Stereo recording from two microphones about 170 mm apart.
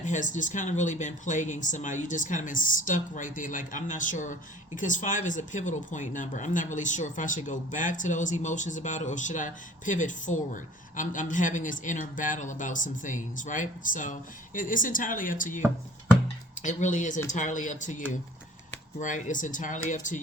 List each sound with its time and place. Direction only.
0.0 s speech: 45° left (ahead or behind)